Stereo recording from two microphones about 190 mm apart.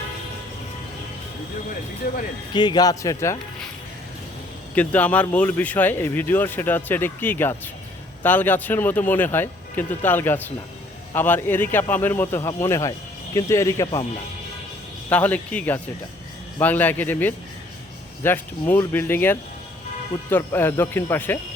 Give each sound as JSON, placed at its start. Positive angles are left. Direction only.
{"t": 2.5, "sound": "speech", "side_deg": 25}
{"t": 4.7, "sound": "speech", "side_deg": 10}
{"t": 15.1, "sound": "speech", "side_deg": 10}